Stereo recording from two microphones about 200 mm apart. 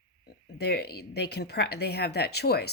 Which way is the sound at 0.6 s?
55° left (ahead or behind).